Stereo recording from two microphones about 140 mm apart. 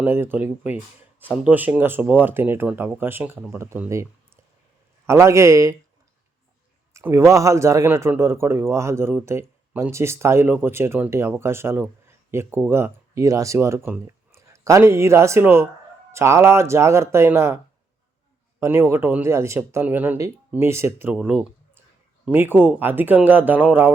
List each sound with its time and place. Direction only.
0.0 s speech: 15° right (ahead or behind)
5.0 s a man's voice: 20° right (ahead or behind)
6.9 s a man's voice: 20° right (ahead or behind)
18.6 s speech: 20° right (ahead or behind)
21.1 s speech: 10° right (ahead or behind)